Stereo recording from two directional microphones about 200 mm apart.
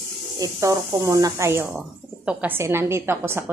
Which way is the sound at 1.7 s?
5° right (ahead or behind).